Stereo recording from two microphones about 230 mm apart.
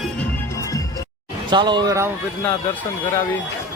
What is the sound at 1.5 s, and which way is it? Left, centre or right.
Speech, centre.